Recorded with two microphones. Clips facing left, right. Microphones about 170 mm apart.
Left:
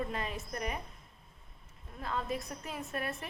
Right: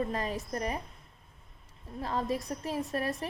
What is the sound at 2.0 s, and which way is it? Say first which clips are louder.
A woman's voice: right 4 dB; 35° right (ahead or behind).